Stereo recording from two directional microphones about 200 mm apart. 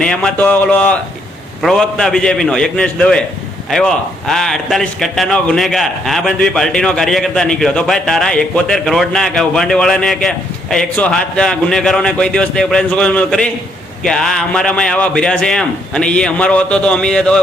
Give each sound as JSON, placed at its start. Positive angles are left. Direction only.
{"t": 0.0, "sound": "speech", "side_deg": 5}